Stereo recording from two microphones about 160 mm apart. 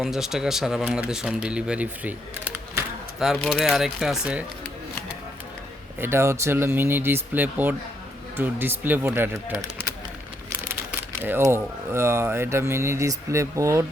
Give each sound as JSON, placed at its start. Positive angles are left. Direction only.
{"t": 0.0, "sound": "speech", "side_deg": 0}
{"t": 6.0, "sound": "speech", "side_deg": -15}
{"t": 11.2, "sound": "speech", "side_deg": -15}